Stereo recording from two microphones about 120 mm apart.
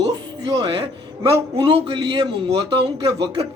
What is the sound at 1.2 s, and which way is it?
A man's voice, 45° right (ahead or behind).